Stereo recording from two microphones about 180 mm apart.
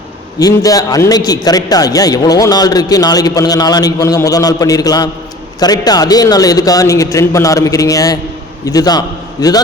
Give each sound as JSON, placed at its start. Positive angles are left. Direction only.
{"t": 0.3, "sound": "a man's voice", "side_deg": 20}